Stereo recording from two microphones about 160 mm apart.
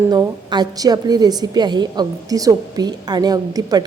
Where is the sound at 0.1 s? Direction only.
25° right (ahead or behind).